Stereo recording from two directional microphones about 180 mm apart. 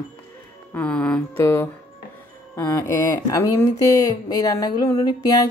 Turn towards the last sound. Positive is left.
turn(degrees=20)  # may be behind; listen again after turning